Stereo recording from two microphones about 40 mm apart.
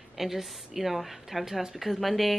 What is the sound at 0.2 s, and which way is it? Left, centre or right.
Speech, centre.